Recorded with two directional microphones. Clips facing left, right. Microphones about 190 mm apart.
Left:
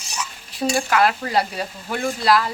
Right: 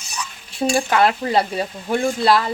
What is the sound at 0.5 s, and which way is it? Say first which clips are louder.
A woman's voice: right 2 dB; 25° right (ahead or behind).